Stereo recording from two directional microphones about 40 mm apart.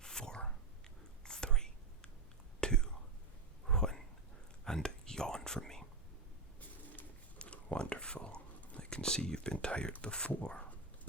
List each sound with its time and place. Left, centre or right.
0.0 s whispering: centre
3.7 s a sound: centre
4.6 s whispering: centre
7.3 s whispering: left
8.8 s a sound: left
10.0 s speech: left